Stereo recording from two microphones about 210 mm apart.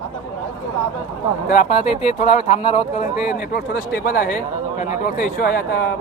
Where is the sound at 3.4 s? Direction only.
50° left (ahead or behind).